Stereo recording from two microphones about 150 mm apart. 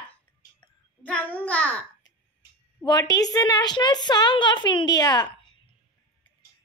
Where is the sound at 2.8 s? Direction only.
25° left (ahead or behind).